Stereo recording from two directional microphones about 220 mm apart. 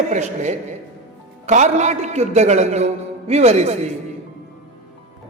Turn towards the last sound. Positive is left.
turn(degrees=-30)  # may be behind; listen again after turning